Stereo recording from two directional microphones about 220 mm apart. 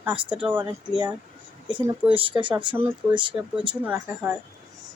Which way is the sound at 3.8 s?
5° right (ahead or behind).